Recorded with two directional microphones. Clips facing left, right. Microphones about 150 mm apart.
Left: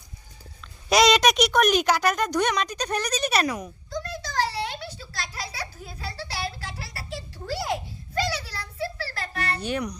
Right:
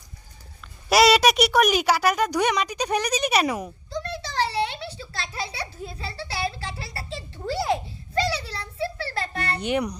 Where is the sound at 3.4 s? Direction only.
25° right (ahead or behind).